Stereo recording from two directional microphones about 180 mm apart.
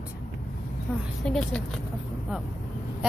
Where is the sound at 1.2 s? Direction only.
5° left (ahead or behind).